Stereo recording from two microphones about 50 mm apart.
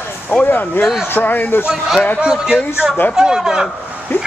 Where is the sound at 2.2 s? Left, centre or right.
Centre.